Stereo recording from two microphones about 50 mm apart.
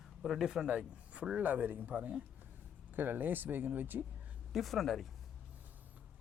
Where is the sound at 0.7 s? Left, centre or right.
Right.